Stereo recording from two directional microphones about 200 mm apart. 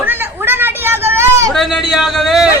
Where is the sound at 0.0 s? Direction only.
10° right (ahead or behind).